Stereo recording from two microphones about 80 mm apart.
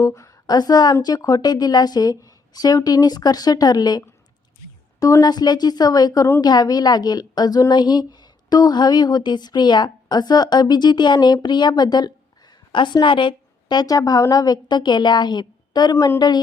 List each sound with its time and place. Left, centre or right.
0.0 s a sound: left
0.5 s speech: left
5.2 s speech: left
12.7 s speech: left